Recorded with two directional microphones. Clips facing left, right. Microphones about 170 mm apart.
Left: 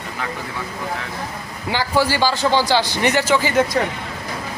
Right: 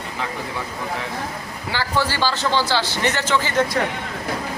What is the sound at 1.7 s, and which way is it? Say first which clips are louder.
A man's voice: left 4 dB; 15° left (ahead or behind).